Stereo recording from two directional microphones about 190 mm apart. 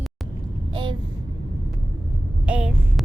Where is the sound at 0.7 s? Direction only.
25° right (ahead or behind).